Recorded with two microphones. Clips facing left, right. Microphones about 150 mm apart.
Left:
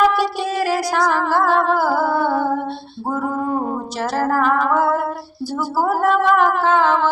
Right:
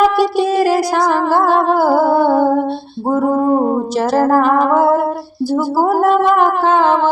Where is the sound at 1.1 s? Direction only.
45° right (ahead or behind).